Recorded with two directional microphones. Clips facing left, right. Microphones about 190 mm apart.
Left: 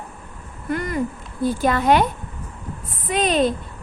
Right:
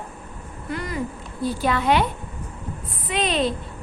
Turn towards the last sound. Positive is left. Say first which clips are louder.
# left 4 dB
turn(degrees=45)  # may be behind; listen again after turning